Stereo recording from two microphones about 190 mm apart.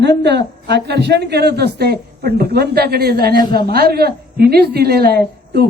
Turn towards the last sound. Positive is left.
turn(degrees=-55)  # may be behind; listen again after turning